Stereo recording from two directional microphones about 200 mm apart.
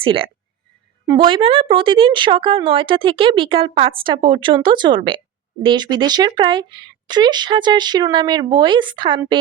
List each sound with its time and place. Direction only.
0.0 s speech: 25° right (ahead or behind)